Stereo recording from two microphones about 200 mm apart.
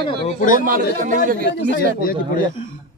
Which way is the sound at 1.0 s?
40° right (ahead or behind).